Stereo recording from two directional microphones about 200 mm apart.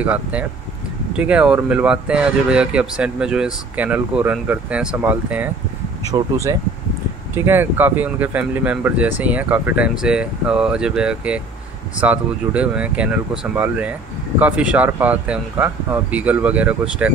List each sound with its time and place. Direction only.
0.0 s speech: 5° right (ahead or behind)